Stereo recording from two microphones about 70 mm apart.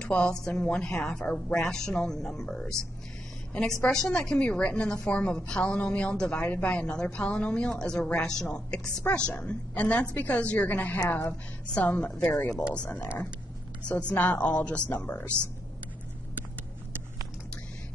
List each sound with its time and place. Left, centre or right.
0.0 s a woman's voice: centre
3.8 s a woman's voice: centre